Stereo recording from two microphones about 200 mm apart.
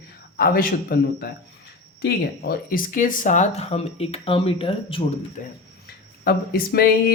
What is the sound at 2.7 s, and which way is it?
Speech, 45° left (ahead or behind).